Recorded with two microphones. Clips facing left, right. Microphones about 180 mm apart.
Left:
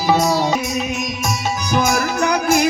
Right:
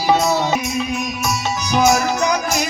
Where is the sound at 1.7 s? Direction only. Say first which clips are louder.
Right 3 dB; 55° left (ahead or behind).